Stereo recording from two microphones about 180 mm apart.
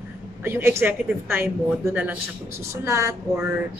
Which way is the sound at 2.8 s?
15° right (ahead or behind).